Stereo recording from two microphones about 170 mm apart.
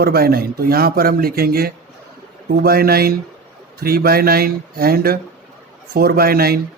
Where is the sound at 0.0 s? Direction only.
65° right (ahead or behind).